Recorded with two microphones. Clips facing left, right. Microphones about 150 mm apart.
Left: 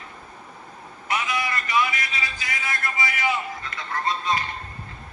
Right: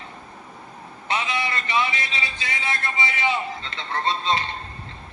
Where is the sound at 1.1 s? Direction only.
25° right (ahead or behind).